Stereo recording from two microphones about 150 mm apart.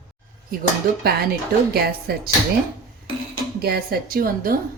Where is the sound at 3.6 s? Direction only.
90° right.